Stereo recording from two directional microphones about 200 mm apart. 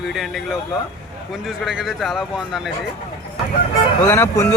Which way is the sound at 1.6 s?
Centre (ahead or behind).